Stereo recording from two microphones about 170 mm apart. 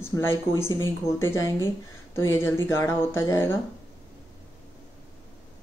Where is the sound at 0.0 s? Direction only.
15° left (ahead or behind).